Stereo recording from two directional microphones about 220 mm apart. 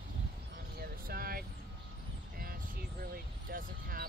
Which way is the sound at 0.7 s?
45° right (ahead or behind).